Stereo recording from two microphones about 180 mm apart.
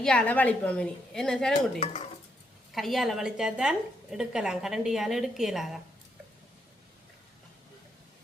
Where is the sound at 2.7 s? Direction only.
Centre (ahead or behind).